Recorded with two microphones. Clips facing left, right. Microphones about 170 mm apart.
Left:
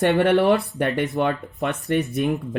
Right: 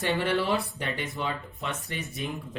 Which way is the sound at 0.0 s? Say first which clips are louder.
Left 10 dB; 65° left (ahead or behind).